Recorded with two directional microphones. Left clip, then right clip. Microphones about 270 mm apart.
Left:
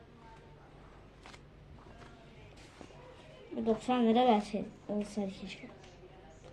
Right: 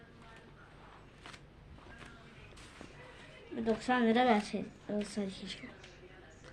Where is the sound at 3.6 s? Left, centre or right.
Centre.